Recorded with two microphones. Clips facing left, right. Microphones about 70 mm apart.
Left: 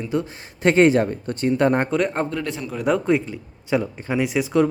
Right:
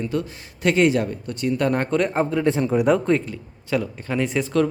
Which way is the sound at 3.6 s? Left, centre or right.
Centre.